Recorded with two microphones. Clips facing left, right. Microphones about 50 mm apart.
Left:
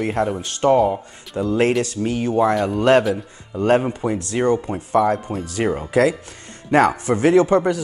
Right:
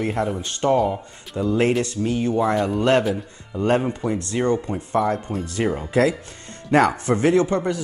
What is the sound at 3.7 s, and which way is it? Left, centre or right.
Speech, centre.